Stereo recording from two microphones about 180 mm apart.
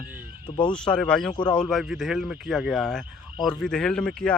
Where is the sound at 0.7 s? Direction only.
5° left (ahead or behind).